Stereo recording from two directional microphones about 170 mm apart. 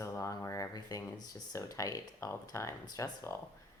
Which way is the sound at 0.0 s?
20° left (ahead or behind).